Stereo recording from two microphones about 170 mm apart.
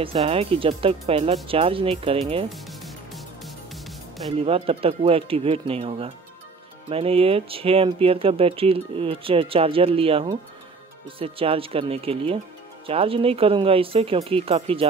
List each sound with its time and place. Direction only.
0.0 s speech: 35° right (ahead or behind)
2.5 s music: centre (ahead or behind)
4.4 s speech: 35° right (ahead or behind)